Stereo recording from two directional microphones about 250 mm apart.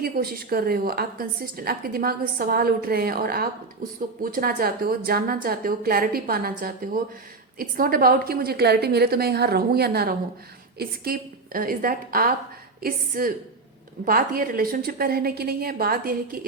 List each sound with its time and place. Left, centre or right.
0.0 s a woman's voice: right